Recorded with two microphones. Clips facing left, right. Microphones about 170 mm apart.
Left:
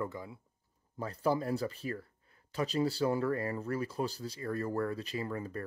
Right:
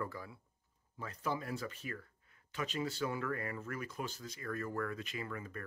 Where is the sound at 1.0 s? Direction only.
35° left (ahead or behind).